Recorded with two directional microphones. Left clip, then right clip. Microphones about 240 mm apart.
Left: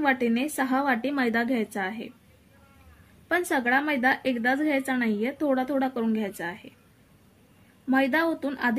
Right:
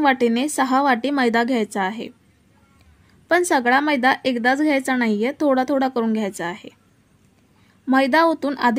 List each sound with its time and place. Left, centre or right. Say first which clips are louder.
0.0 s a woman's voice: right 7 dB; right
3.3 s a woman's voice: right 8 dB; right
7.9 s a woman's voice: right 8 dB; right